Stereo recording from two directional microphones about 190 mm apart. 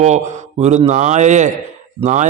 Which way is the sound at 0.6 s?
35° right (ahead or behind).